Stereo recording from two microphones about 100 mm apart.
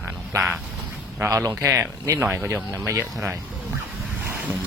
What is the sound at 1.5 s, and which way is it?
Speech, 30° right (ahead or behind).